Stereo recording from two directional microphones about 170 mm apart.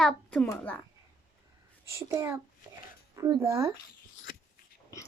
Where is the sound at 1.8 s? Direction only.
15° right (ahead or behind).